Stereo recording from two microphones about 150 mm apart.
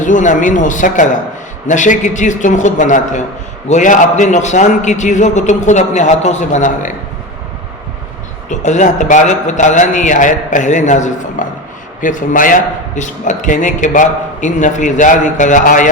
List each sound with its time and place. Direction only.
0.0 s a man's voice: 55° left (ahead or behind)
8.4 s a man's voice: 55° left (ahead or behind)